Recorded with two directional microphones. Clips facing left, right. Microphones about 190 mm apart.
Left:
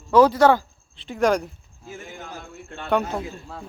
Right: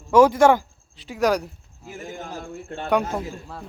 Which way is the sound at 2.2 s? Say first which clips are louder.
Right 4 dB; 45° right (ahead or behind).